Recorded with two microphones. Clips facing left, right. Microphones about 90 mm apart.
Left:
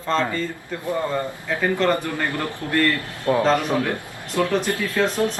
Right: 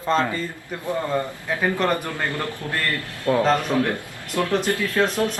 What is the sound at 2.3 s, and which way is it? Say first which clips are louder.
Speech: left 2 dB; 20° left (ahead or behind).